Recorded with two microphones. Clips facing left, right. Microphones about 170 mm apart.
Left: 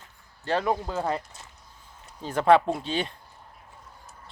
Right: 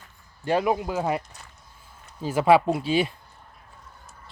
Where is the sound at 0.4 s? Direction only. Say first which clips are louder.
Right 3 dB; 10° right (ahead or behind).